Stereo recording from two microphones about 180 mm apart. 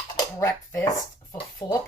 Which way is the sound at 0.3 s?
15° left (ahead or behind).